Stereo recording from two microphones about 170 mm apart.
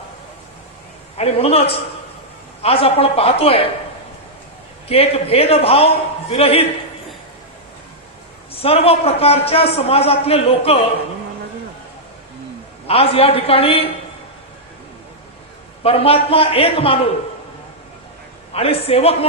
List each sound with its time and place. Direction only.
1.1 s a man's voice: 35° left (ahead or behind)
4.9 s a man's voice: 35° left (ahead or behind)
8.5 s a man's voice: 35° left (ahead or behind)
12.9 s a man's voice: 35° left (ahead or behind)
15.8 s a man's voice: 35° left (ahead or behind)
18.5 s a man's voice: 35° left (ahead or behind)